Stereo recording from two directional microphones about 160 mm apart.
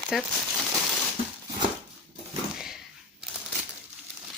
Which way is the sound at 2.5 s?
5° right (ahead or behind).